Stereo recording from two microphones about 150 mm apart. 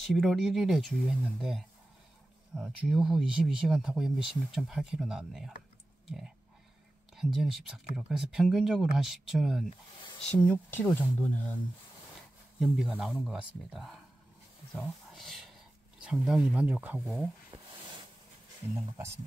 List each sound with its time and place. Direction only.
0.0 s speech: centre (ahead or behind)
2.6 s speech: centre (ahead or behind)
6.0 s a sound: centre (ahead or behind)
7.2 s speech: centre (ahead or behind)
10.3 s speech: 10° left (ahead or behind)
12.5 s speech: 5° right (ahead or behind)
18.8 s speech: 20° right (ahead or behind)